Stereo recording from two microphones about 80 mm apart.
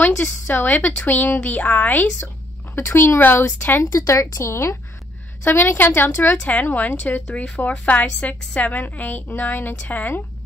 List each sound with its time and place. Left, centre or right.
0.2 s a woman's voice: left
3.8 s a woman's voice: left
5.4 s a woman's voice: left
6.3 s a woman's voice: centre